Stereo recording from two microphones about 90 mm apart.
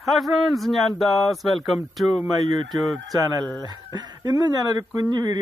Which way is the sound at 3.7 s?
45° right (ahead or behind).